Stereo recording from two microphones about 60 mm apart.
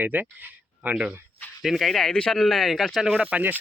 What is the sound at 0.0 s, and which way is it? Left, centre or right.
Speech, right.